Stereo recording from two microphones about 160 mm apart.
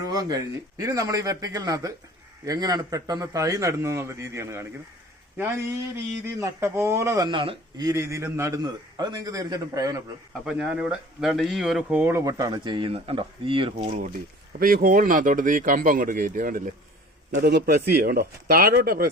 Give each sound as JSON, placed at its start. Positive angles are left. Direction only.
{"t": 0.0, "sound": "a man's voice", "side_deg": -25}
{"t": 10.4, "sound": "speech", "side_deg": -5}
{"t": 14.6, "sound": "speech", "side_deg": -60}
{"t": 17.4, "sound": "speech", "side_deg": -85}